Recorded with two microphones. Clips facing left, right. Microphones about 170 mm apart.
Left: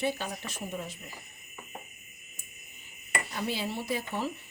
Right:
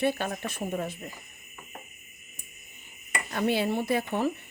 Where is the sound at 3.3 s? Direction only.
60° right (ahead or behind).